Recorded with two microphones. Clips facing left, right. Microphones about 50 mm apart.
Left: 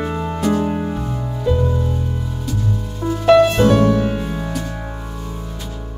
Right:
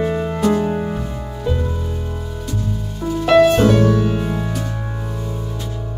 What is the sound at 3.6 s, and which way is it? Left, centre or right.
Music, left.